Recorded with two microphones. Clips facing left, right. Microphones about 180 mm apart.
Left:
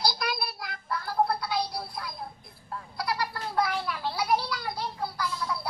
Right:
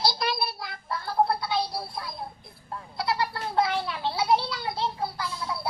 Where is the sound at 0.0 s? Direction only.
25° right (ahead or behind).